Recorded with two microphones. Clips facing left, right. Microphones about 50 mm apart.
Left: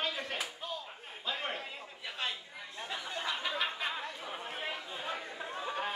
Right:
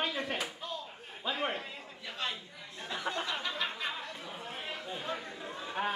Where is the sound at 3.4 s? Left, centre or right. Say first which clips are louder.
Left 1 dB; centre.